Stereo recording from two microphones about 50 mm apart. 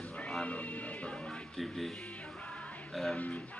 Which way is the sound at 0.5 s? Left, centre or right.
Left.